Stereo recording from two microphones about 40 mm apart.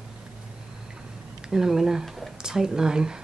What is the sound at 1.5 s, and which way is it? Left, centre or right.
Speech, centre.